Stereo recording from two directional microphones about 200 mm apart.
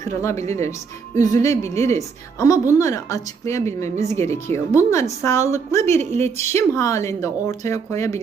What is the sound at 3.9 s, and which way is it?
Speech, 35° right (ahead or behind).